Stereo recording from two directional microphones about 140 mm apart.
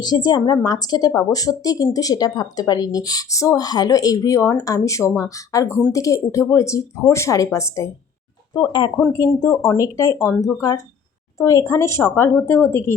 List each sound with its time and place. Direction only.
0.0 s speech: 30° left (ahead or behind)
8.5 s speech: 30° left (ahead or behind)